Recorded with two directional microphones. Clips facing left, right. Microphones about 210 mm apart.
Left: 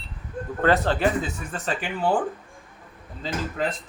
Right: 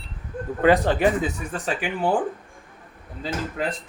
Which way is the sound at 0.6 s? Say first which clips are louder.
Right 3 dB; 15° right (ahead or behind).